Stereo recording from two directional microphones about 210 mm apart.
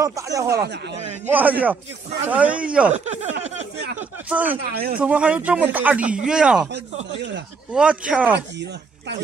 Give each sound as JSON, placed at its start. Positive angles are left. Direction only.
{"t": 0.0, "sound": "a man's voice", "side_deg": -15}
{"t": 0.5, "sound": "speech", "side_deg": -50}
{"t": 1.2, "sound": "a man's voice", "side_deg": -10}
{"t": 2.9, "sound": "speech", "side_deg": -35}
{"t": 4.3, "sound": "a man's voice", "side_deg": -5}
{"t": 4.6, "sound": "speech", "side_deg": -45}
{"t": 4.9, "sound": "speech", "side_deg": -5}
{"t": 7.2, "sound": "speech", "side_deg": -55}
{"t": 7.7, "sound": "speech", "side_deg": -5}